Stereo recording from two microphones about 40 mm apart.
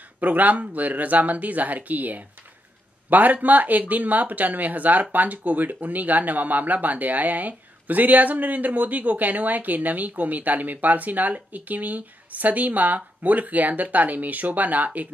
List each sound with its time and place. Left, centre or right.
0.2 s a man's voice: right